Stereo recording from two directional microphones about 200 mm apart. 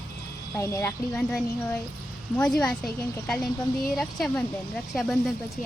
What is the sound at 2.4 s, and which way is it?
A child's voice, 5° left (ahead or behind).